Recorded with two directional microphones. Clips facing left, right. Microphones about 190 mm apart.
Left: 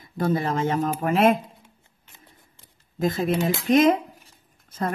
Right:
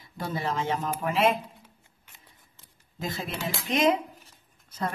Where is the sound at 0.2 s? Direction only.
50° left (ahead or behind).